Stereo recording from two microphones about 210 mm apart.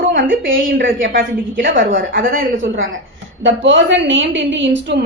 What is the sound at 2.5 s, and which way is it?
A man's voice, 65° right (ahead or behind).